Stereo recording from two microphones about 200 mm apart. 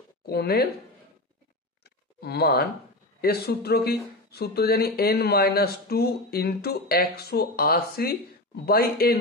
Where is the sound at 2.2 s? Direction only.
55° left (ahead or behind).